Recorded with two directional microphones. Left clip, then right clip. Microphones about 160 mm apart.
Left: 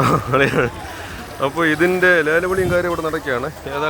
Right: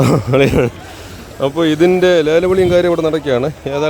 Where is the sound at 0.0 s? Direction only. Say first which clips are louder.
Right 3 dB; 85° right.